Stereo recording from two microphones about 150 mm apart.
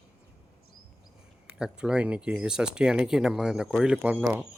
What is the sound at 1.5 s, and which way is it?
Speech, 5° right (ahead or behind).